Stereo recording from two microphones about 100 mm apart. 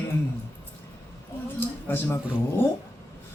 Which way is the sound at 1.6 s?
20° left (ahead or behind).